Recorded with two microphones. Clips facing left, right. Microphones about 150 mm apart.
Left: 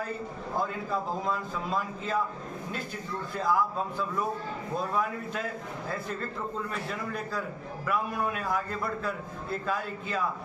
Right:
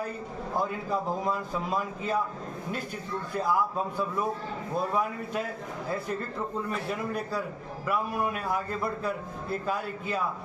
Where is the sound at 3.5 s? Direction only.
10° right (ahead or behind).